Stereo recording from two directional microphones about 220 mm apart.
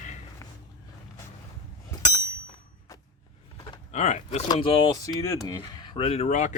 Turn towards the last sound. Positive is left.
turn(degrees=35)  # may be behind; listen again after turning